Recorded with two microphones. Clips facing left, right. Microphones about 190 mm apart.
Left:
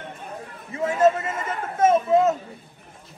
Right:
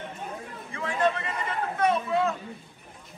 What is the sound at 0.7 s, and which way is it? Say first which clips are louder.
Chatter: left 7 dB; 40° left (ahead or behind).